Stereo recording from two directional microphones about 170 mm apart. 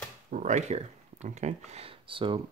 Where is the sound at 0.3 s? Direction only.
45° right (ahead or behind); by 2.4 s 30° right (ahead or behind).